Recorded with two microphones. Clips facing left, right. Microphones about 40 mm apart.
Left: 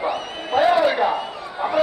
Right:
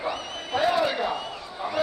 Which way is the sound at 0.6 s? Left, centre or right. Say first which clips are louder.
Left 7 dB; left.